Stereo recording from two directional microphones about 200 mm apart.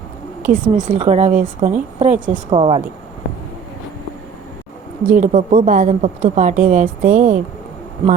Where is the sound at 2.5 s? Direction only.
25° right (ahead or behind).